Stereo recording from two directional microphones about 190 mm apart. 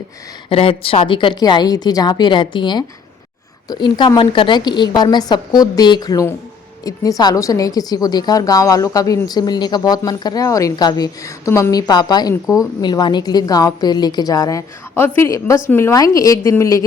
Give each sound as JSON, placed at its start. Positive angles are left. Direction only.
{"t": 0.5, "sound": "a woman's voice", "side_deg": 30}